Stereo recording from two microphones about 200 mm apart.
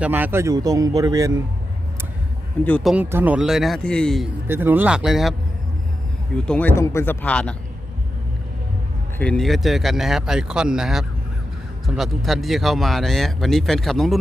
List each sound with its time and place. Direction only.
0.0 s speech: 10° right (ahead or behind)
2.6 s speech: 5° left (ahead or behind)
2.9 s speech: 10° right (ahead or behind)
4.4 s speech: 10° right (ahead or behind)
6.3 s speech: 5° left (ahead or behind)
9.1 s speech: 5° left (ahead or behind)